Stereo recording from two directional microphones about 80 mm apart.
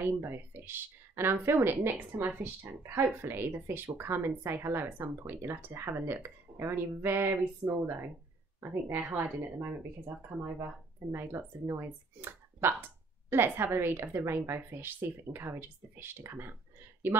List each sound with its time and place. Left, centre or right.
0.0 s speech: right